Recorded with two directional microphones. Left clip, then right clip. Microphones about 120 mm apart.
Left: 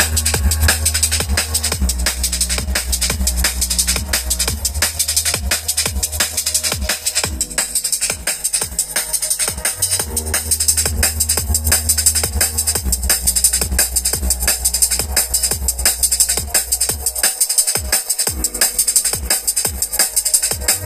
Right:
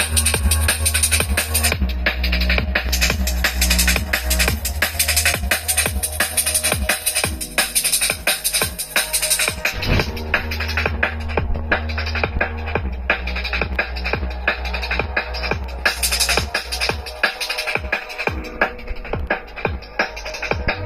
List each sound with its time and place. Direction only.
0.0 s music: 40° left (ahead or behind)
9.4 s music: 55° left (ahead or behind)
10.7 s music: 90° left